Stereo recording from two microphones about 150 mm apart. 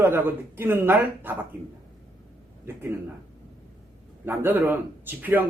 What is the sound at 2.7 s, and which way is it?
Speech, 15° right (ahead or behind).